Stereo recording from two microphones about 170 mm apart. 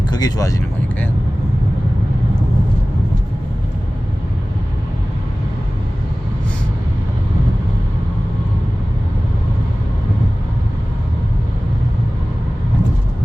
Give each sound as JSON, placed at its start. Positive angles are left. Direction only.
{"t": 0.1, "sound": "speech", "side_deg": 20}